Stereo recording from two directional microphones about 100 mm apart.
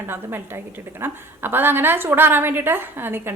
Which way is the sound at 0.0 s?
25° right (ahead or behind).